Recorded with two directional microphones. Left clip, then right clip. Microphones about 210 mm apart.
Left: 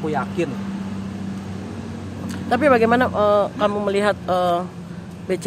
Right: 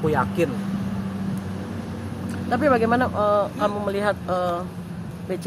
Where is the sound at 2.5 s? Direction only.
30° left (ahead or behind).